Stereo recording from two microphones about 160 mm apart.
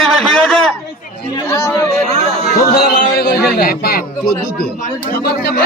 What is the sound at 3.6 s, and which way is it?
Speech, 75° left (ahead or behind).